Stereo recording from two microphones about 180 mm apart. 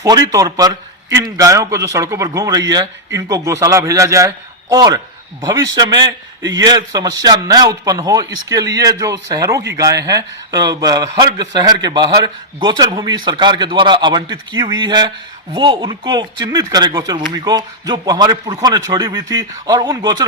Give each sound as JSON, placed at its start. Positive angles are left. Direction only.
{"t": 0.0, "sound": "a man's voice", "side_deg": -20}